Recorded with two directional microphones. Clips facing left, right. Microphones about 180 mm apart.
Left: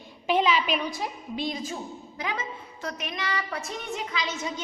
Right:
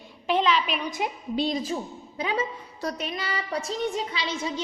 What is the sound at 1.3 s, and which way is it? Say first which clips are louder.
A woman's voice: right 5 dB; 35° right (ahead or behind).